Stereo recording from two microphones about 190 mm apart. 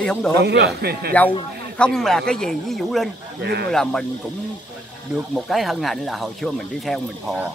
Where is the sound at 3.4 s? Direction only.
60° right (ahead or behind).